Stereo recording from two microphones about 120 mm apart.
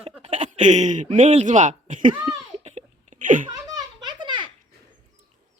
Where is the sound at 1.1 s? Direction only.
70° right (ahead or behind); by 2.1 s 90° right.